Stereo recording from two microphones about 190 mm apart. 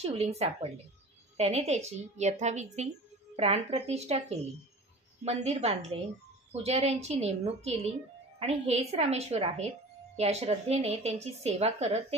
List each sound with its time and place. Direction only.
0.0 s a woman's voice: 35° right (ahead or behind)